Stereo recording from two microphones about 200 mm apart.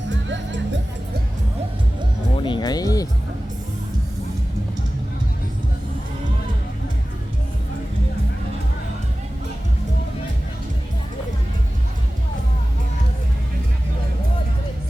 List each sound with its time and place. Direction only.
0.1 s music: 65° right (ahead or behind)
2.4 s music: 20° left (ahead or behind)